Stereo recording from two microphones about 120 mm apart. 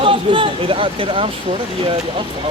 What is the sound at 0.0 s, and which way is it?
Speech, 45° right (ahead or behind).